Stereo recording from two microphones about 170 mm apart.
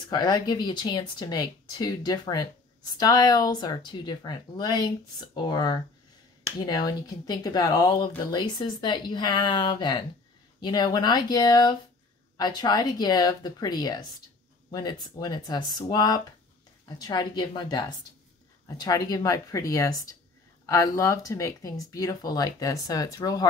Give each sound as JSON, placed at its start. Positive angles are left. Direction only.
{"t": 0.1, "sound": "speech", "side_deg": 25}